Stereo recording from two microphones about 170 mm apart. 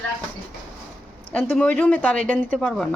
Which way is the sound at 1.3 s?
10° left (ahead or behind).